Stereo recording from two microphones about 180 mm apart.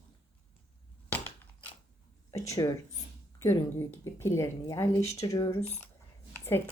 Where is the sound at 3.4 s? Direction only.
15° left (ahead or behind).